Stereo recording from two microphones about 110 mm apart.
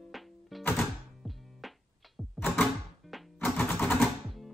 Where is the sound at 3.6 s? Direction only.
20° left (ahead or behind).